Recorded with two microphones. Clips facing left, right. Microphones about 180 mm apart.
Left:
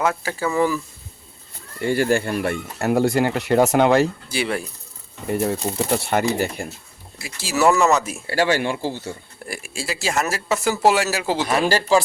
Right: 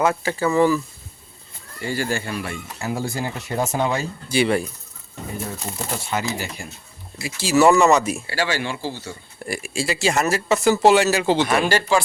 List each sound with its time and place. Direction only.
0.0 s speech: centre (ahead or behind)
1.8 s speech: 55° left (ahead or behind)
4.3 s speech: centre (ahead or behind)
5.3 s speech: 65° left (ahead or behind)
7.2 s speech: centre (ahead or behind)
8.3 s speech: 50° left (ahead or behind)
9.4 s speech: centre (ahead or behind)
11.4 s speech: 35° left (ahead or behind)